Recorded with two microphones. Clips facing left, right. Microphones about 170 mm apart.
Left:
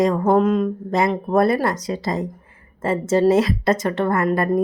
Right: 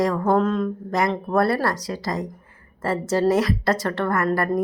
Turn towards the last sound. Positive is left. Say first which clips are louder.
# left 3 dB
turn(degrees=20)  # may be behind; listen again after turning